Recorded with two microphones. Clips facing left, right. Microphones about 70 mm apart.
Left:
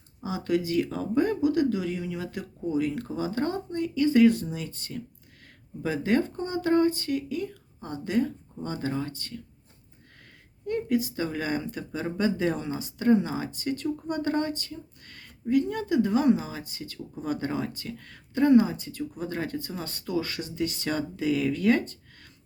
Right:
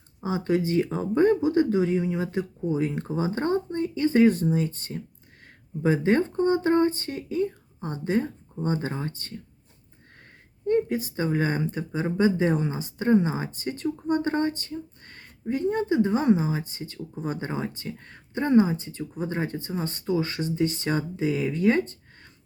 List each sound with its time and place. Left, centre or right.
0.2 s speech: right
10.7 s speech: right